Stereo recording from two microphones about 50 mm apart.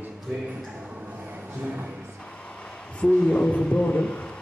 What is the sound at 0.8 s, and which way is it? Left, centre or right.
Music, right.